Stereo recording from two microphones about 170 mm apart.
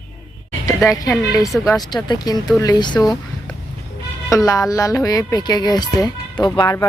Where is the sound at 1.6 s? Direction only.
20° left (ahead or behind).